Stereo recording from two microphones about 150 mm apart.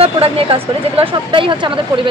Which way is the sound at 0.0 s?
40° right (ahead or behind).